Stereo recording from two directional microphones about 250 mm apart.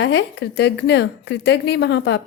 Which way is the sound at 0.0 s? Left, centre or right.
Left.